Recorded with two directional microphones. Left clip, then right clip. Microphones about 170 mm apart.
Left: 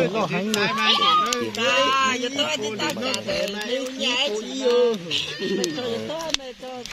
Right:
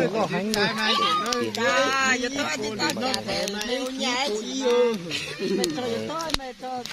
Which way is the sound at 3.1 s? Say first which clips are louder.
Left 2 dB; 10° right (ahead or behind).